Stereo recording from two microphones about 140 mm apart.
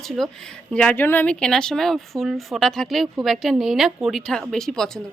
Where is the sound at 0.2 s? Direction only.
Centre (ahead or behind).